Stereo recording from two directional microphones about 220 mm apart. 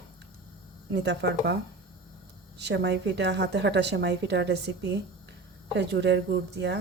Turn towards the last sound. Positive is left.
turn(degrees=-50)  # may be behind; listen again after turning